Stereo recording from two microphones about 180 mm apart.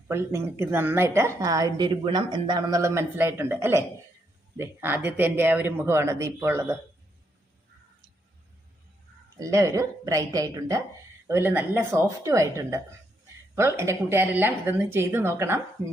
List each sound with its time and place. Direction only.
0.1 s a woman's voice: 15° right (ahead or behind)
9.4 s a woman's voice: 15° right (ahead or behind)